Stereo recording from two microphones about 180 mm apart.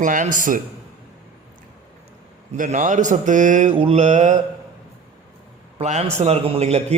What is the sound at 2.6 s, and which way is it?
A man's voice, 45° right (ahead or behind).